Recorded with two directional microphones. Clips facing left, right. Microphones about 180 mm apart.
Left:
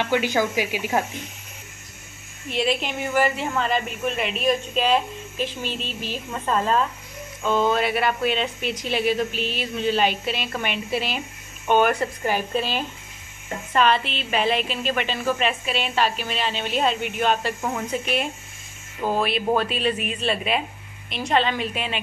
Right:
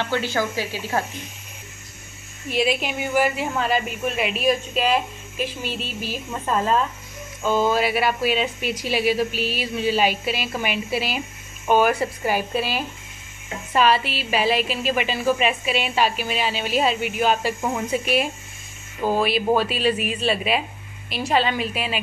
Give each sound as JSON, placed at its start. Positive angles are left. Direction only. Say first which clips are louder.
{"t": 0.0, "sound": "speech", "louder": "left 2 dB", "side_deg": 15}
{"t": 2.5, "sound": "a woman's voice", "louder": "right 2 dB", "side_deg": -10}